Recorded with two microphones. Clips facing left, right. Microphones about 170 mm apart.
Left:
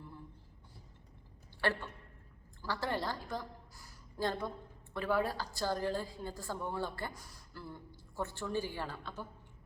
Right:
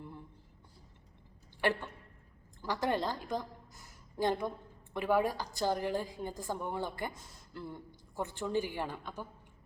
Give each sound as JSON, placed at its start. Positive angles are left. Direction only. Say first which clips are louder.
{"t": 1.6, "sound": "a woman's voice", "louder": "right 3 dB", "side_deg": -15}